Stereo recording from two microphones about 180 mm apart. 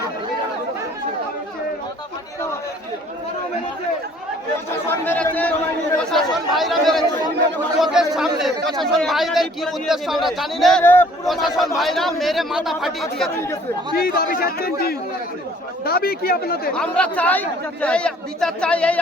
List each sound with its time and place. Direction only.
4.9 s speech: 10° left (ahead or behind)
11.3 s speech: centre (ahead or behind)
13.9 s a man's voice: 55° left (ahead or behind)
16.7 s speech: 5° left (ahead or behind)